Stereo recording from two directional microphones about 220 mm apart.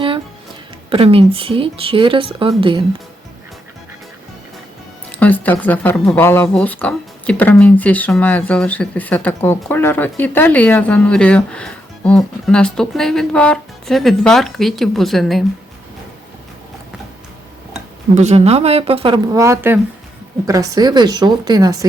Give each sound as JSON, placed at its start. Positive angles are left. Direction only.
{"t": 0.9, "sound": "a woman's voice", "side_deg": -25}
{"t": 5.2, "sound": "speech", "side_deg": 5}
{"t": 18.1, "sound": "a woman's voice", "side_deg": -30}